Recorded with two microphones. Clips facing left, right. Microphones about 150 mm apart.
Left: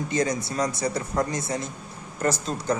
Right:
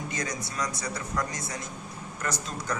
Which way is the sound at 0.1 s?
25° left (ahead or behind).